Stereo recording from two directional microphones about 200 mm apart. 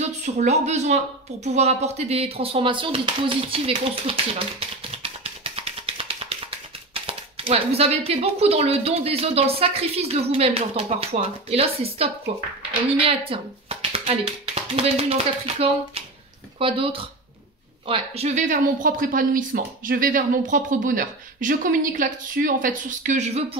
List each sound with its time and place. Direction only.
0.0 s a woman's voice: 35° right (ahead or behind)